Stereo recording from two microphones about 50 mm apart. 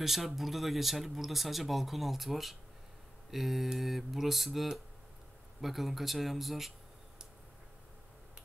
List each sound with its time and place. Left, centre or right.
0.0 s speech: centre